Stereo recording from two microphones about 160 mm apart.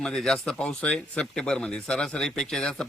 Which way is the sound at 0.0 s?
5° left (ahead or behind).